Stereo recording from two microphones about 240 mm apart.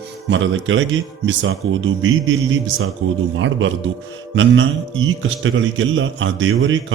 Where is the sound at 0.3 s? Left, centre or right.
Right.